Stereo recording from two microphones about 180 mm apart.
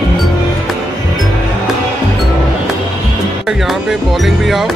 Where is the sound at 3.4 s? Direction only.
Centre (ahead or behind).